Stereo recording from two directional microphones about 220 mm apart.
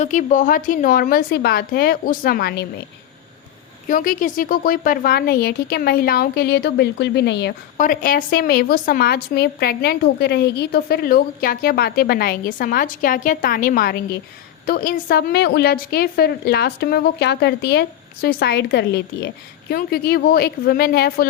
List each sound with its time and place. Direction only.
0.0 s a woman's voice: 35° left (ahead or behind)
3.8 s a woman's voice: 40° left (ahead or behind)
7.8 s a woman's voice: 40° left (ahead or behind)